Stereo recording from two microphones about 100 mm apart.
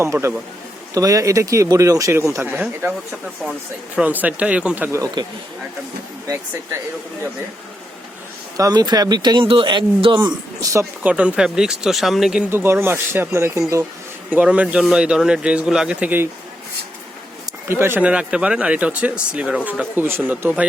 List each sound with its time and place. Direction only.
0.0 s speech: 30° right (ahead or behind)
3.9 s a man's voice: 15° right (ahead or behind)
4.9 s speech: 30° right (ahead or behind)
8.5 s speech: 40° right (ahead or behind)
11.0 s a man's voice: 10° right (ahead or behind)
12.5 s speech: 25° right (ahead or behind)
14.4 s a man's voice: 15° right (ahead or behind)
17.7 s speech: 25° right (ahead or behind)
18.1 s a man's voice: 10° right (ahead or behind)
20.0 s speech: 20° right (ahead or behind)